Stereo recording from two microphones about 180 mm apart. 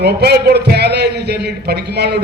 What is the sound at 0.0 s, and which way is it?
A man's voice, 65° right (ahead or behind).